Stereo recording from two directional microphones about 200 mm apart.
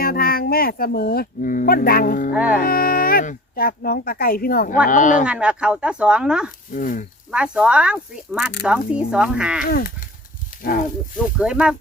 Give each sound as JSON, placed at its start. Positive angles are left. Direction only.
{"t": 0.0, "sound": "speech", "side_deg": 45}
{"t": 2.3, "sound": "speech", "side_deg": -5}
{"t": 2.6, "sound": "speech", "side_deg": 45}
{"t": 5.2, "sound": "speech", "side_deg": -5}
{"t": 6.7, "sound": "speech", "side_deg": 40}
{"t": 7.3, "sound": "speech", "side_deg": -5}
{"t": 9.6, "sound": "speech", "side_deg": 45}
{"t": 11.3, "sound": "speech", "side_deg": -5}